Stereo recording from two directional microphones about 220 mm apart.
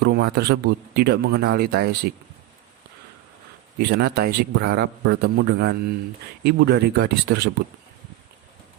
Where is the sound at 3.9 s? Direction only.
45° right (ahead or behind).